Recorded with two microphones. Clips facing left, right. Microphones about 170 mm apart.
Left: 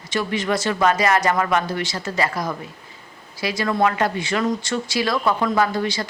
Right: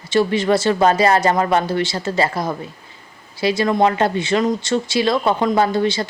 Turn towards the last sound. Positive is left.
turn(degrees=-25)  # may be behind; listen again after turning